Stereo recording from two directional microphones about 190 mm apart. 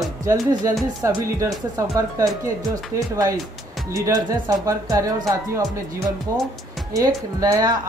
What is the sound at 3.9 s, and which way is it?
Speech, 15° right (ahead or behind).